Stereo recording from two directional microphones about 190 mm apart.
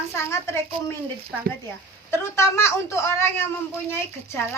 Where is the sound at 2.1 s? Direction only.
15° left (ahead or behind).